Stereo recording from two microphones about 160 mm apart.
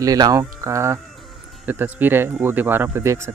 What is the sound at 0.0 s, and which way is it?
Speech, 20° right (ahead or behind).